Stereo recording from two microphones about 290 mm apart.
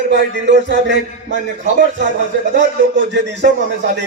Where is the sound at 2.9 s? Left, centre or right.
Right.